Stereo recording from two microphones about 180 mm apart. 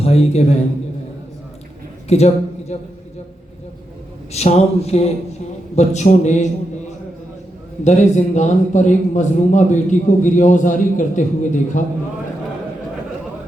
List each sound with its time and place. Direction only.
0.0 s a man's voice: 35° left (ahead or behind)
2.0 s a woman's voice: 40° left (ahead or behind)
4.3 s a man's voice: 35° left (ahead or behind)
7.9 s a man's voice: 40° left (ahead or behind)